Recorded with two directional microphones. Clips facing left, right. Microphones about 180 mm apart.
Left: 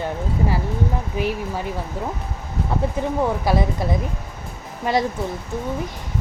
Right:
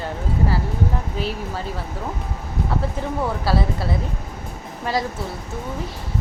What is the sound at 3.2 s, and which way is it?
Speech, 15° left (ahead or behind).